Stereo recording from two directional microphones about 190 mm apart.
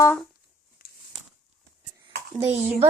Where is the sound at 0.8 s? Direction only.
50° left (ahead or behind).